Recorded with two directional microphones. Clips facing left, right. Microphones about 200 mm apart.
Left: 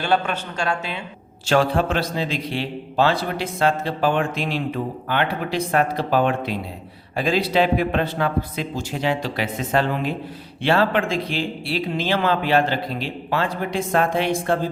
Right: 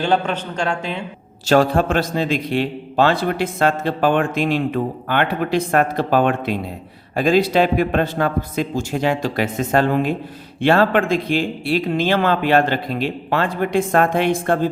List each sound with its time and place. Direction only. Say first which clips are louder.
0.3 s a woman's voice: right 3 dB; 10° left (ahead or behind)
1.5 s a man's voice: right 4 dB; 45° right (ahead or behind)